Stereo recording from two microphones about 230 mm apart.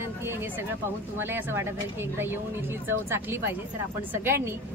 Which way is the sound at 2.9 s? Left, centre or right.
Centre.